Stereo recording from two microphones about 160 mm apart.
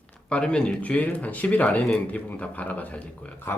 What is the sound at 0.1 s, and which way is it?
Speech, 5° left (ahead or behind).